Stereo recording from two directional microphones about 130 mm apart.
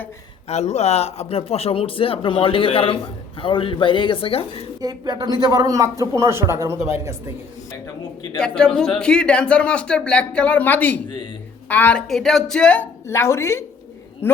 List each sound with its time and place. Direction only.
0.4 s speech: 60° left (ahead or behind)
4.8 s a man's voice: 30° right (ahead or behind)
8.4 s a man's voice: 5° left (ahead or behind)